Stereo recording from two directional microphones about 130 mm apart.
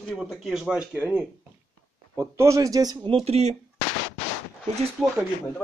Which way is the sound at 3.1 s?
50° right (ahead or behind).